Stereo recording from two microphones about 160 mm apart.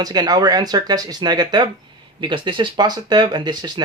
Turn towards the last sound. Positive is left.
turn(degrees=-25)  # may be behind; listen again after turning